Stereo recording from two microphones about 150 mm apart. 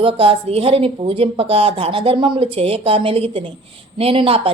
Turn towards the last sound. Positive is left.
turn(degrees=-35)  # may be behind; listen again after turning